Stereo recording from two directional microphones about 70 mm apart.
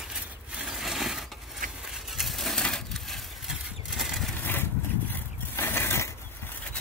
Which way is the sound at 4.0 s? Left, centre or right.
Centre.